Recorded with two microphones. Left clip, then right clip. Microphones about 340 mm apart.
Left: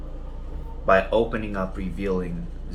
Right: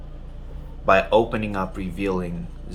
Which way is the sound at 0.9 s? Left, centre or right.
Right.